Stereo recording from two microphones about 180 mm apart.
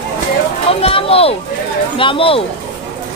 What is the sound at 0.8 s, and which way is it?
A woman's voice, 30° left (ahead or behind).